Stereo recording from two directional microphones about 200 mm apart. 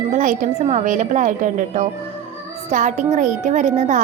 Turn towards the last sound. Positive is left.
turn(degrees=-35)  # may be behind; listen again after turning